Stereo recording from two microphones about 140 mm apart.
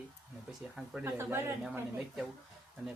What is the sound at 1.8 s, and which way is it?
Speech, 5° right (ahead or behind).